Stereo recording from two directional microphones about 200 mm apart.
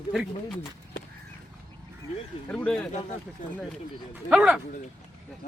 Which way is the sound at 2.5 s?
5° left (ahead or behind).